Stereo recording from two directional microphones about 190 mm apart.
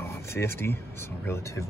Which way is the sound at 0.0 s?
15° left (ahead or behind).